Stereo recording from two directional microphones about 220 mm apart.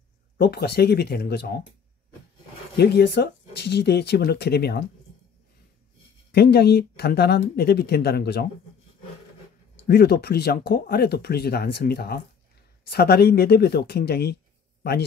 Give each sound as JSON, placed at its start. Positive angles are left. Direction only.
{"t": 0.4, "sound": "speech", "side_deg": 45}
{"t": 2.8, "sound": "speech", "side_deg": 50}
{"t": 6.3, "sound": "speech", "side_deg": 45}
{"t": 9.8, "sound": "speech", "side_deg": 45}